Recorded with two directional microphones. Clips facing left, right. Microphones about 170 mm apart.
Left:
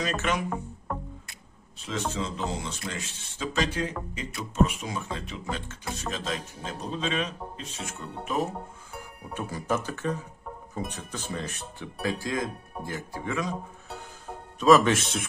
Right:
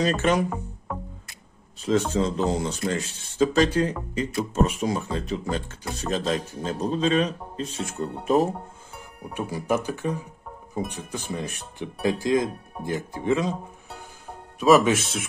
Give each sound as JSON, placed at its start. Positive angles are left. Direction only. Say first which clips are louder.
{"t": 0.0, "sound": "speech", "louder": "right 7 dB", "side_deg": -35}
{"t": 0.5, "sound": "music", "louder": "even", "side_deg": 0}
{"t": 2.1, "sound": "speech", "louder": "right 8 dB", "side_deg": -40}
{"t": 9.3, "sound": "speech", "louder": "right 4 dB", "side_deg": -15}
{"t": 14.6, "sound": "speech", "louder": "right 2 dB", "side_deg": -10}